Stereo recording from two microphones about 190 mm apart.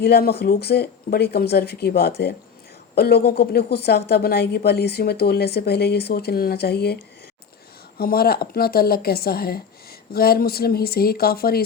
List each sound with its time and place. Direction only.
0.0 s a woman's voice: 55° left (ahead or behind)